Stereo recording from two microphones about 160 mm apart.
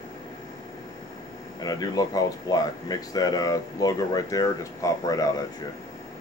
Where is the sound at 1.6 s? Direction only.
25° left (ahead or behind).